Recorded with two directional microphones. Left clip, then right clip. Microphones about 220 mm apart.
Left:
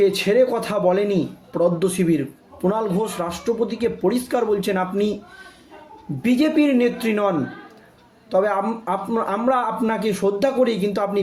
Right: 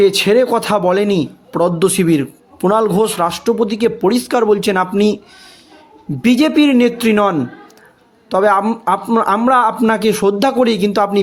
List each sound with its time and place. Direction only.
0.0 s a man's voice: 45° right (ahead or behind)
6.2 s a man's voice: 45° right (ahead or behind)